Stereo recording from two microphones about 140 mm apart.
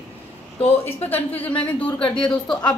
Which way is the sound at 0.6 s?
45° left (ahead or behind).